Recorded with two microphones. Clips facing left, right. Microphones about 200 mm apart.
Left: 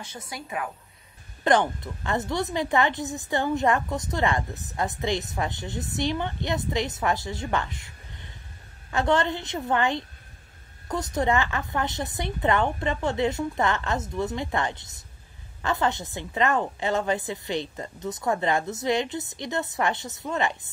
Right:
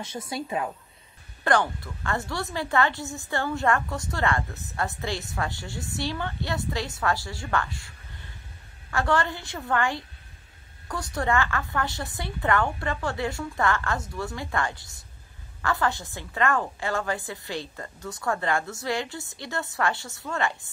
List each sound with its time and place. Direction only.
0.3 s a woman's voice: 25° right (ahead or behind)
1.4 s a woman's voice: 20° left (ahead or behind)
8.9 s a woman's voice: 20° left (ahead or behind)